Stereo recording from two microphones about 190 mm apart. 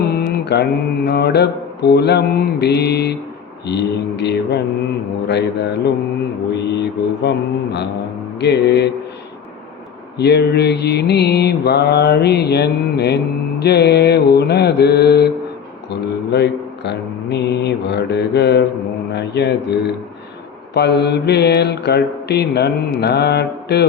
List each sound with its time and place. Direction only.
0.0 s mantra: 55° left (ahead or behind)
10.2 s mantra: 60° left (ahead or behind)
15.9 s speech: 60° left (ahead or behind)
20.7 s mantra: 60° left (ahead or behind)